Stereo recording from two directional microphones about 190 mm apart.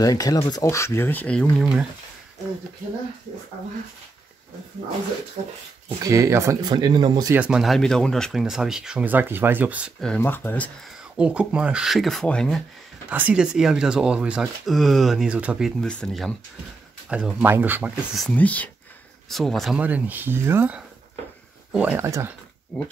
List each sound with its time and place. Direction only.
0.0 s speech: 20° left (ahead or behind); by 1.9 s centre (ahead or behind)
6.0 s speech: 15° right (ahead or behind)
7.3 s speech: 5° right (ahead or behind)
11.1 s speech: 5° right (ahead or behind)
13.1 s speech: 5° right (ahead or behind)
18.2 s speech: 10° left (ahead or behind); by 22.3 s 15° right (ahead or behind)